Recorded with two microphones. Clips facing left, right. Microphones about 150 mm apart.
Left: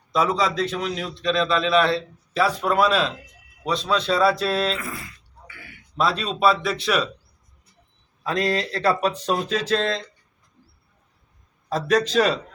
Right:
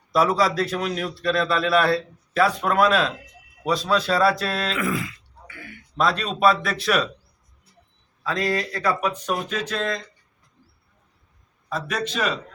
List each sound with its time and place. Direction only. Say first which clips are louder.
0.1 s a man's voice: right 2 dB; 5° right (ahead or behind)
4.8 s grunt: right 9 dB; 90° right
6.0 s a man's voice: right 1 dB; centre (ahead or behind)
8.2 s speech: left 1 dB; 20° left (ahead or behind)
11.7 s a man's voice: left 7 dB; 35° left (ahead or behind)